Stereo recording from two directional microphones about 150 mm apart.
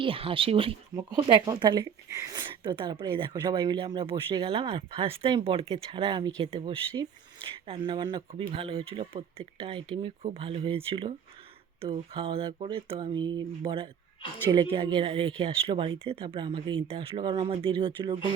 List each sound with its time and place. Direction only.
0.0 s speech: 35° right (ahead or behind)